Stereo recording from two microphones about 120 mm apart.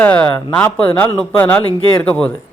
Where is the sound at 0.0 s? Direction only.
10° left (ahead or behind).